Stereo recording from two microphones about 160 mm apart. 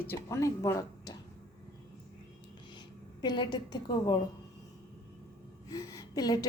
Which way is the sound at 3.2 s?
25° left (ahead or behind).